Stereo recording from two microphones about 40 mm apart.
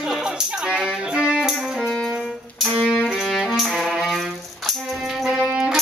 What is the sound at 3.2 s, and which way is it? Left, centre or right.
Music, centre.